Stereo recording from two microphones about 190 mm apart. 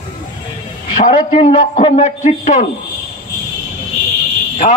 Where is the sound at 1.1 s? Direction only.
25° left (ahead or behind).